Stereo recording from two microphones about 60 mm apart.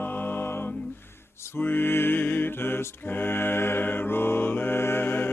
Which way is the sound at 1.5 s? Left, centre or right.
Left.